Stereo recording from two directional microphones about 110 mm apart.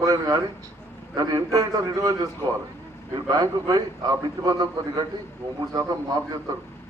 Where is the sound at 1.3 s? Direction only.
30° right (ahead or behind).